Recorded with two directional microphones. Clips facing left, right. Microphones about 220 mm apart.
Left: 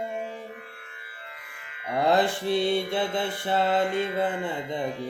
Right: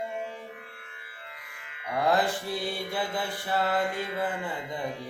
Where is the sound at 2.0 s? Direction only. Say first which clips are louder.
Left 3 dB; 25° left (ahead or behind).